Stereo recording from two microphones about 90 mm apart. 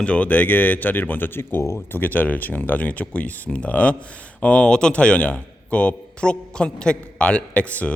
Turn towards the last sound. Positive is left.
turn(degrees=15)  # may be behind; listen again after turning